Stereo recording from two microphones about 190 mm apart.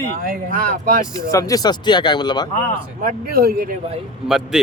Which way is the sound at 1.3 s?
15° left (ahead or behind).